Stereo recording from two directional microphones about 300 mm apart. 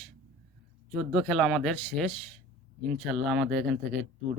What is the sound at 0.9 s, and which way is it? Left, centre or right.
Speech, centre.